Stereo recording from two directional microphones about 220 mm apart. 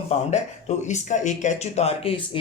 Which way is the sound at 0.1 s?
25° left (ahead or behind).